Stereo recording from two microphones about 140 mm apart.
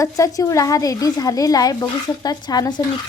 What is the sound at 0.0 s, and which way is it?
A woman's voice, 25° left (ahead or behind).